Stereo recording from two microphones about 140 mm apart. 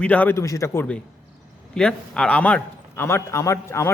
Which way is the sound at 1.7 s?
5° left (ahead or behind).